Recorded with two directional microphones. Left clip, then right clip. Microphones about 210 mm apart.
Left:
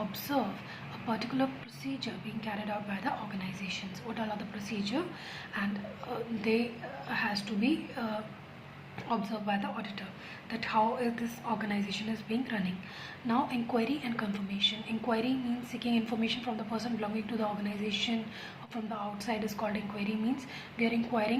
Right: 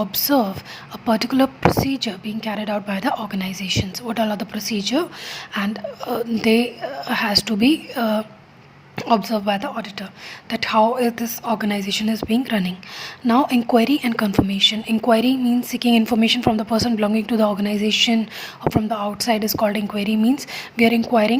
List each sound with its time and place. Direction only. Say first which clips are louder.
0.1 s a woman's voice: right 14 dB; 50° right (ahead or behind)